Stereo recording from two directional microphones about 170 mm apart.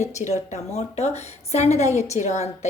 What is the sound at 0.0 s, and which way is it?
A woman's voice, 40° left (ahead or behind).